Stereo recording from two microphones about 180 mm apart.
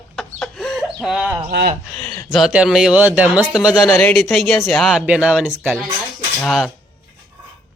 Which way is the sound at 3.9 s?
10° left (ahead or behind).